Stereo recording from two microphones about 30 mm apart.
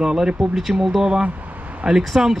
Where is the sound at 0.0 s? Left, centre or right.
Right.